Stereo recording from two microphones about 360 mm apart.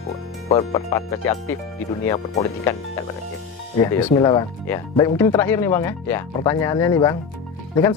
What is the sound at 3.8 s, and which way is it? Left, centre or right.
Speech, centre.